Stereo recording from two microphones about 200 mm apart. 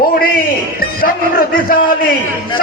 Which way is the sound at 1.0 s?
45° left (ahead or behind).